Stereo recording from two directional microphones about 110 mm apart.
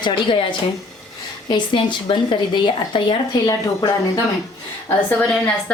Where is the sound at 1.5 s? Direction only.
45° left (ahead or behind).